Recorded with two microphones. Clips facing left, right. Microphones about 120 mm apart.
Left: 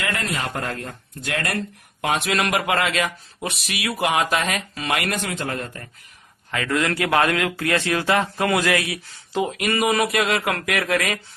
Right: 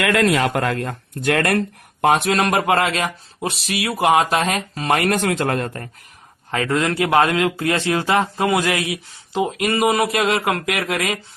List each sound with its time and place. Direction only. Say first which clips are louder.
0.0 s speech: right 9 dB; 90° right; by 2.0 s 60° right (ahead or behind)
2.0 s speech: right 6 dB; 40° right (ahead or behind)
5.1 s speech: right 7 dB; 60° right (ahead or behind)
6.5 s speech: right 3 dB; 30° right (ahead or behind)